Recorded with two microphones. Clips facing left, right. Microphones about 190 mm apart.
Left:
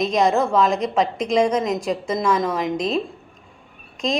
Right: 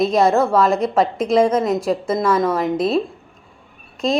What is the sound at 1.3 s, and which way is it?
A woman's voice, 15° left (ahead or behind).